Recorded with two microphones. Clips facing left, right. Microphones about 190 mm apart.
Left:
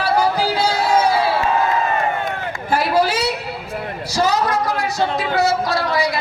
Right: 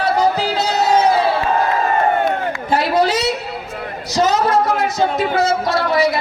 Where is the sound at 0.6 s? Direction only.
20° right (ahead or behind).